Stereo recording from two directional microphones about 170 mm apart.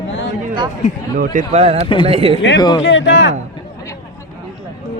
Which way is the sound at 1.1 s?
55° right (ahead or behind).